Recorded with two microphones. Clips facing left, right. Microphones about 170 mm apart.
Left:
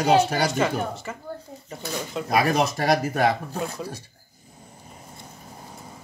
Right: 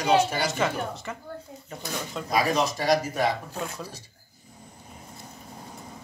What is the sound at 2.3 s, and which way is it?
Speech, 60° left (ahead or behind).